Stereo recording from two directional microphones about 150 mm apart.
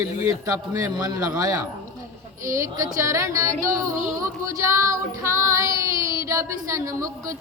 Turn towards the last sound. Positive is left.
turn(degrees=-20)  # may be behind; listen again after turning